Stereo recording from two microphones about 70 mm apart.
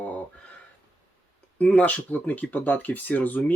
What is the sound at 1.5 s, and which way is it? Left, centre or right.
Speech, left.